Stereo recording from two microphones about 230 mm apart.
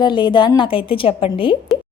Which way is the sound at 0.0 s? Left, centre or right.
Centre.